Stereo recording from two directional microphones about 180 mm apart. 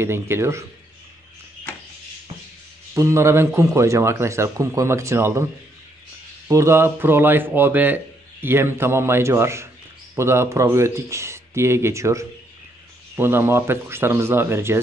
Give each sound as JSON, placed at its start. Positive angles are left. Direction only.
{"t": 0.0, "sound": "speech", "side_deg": -15}
{"t": 2.9, "sound": "speech", "side_deg": -15}